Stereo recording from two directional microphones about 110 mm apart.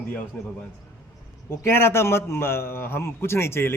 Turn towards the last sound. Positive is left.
turn(degrees=25)  # may be behind; listen again after turning